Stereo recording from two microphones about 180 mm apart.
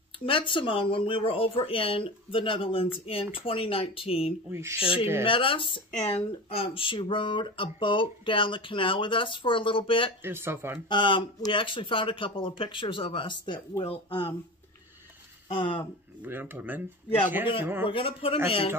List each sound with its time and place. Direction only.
0.2 s speech: 30° left (ahead or behind)
4.5 s speech: 15° right (ahead or behind)
5.2 s speech: 30° left (ahead or behind)
10.2 s speech: 15° right (ahead or behind)
10.9 s speech: 25° left (ahead or behind)
15.4 s speech: 30° left (ahead or behind)
16.2 s speech: 10° right (ahead or behind)
17.8 s speech: 30° left (ahead or behind)